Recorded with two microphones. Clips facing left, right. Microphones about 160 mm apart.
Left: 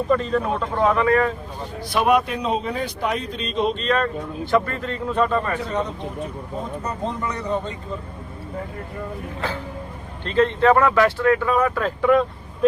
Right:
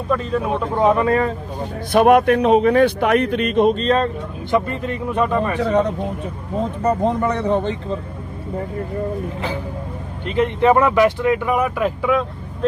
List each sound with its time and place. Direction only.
0.1 s speech: 5° right (ahead or behind)
0.8 s speech: 25° right (ahead or behind)
1.9 s a man's voice: 50° right (ahead or behind)
3.8 s speech: 30° right (ahead or behind)
4.5 s speech: 20° right (ahead or behind)
6.8 s a man's voice: 55° right (ahead or behind)
10.2 s speech: 15° right (ahead or behind)